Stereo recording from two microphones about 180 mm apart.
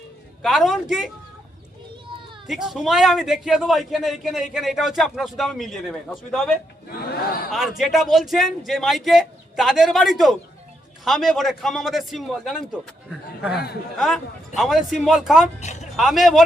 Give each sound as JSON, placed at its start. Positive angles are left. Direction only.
{"t": 0.4, "sound": "a man's voice", "side_deg": 0}
{"t": 2.5, "sound": "a man's voice", "side_deg": 0}
{"t": 6.8, "sound": "a sound", "side_deg": 55}
{"t": 7.5, "sound": "a man's voice", "side_deg": 0}
{"t": 13.5, "sound": "a man's voice", "side_deg": 65}
{"t": 14.0, "sound": "a man's voice", "side_deg": 0}
{"t": 15.6, "sound": "a sound", "side_deg": 40}
{"t": 16.0, "sound": "a man's voice", "side_deg": 0}